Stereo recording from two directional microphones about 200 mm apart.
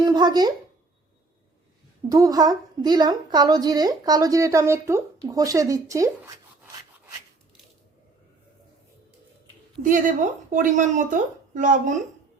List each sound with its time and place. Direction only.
0.0 s a sound: 20° right (ahead or behind)
2.0 s a woman's voice: 15° right (ahead or behind)
9.8 s speech: 40° right (ahead or behind)